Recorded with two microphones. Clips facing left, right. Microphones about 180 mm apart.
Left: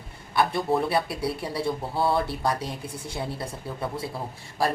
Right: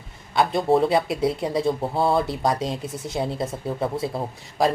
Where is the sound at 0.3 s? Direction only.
25° right (ahead or behind).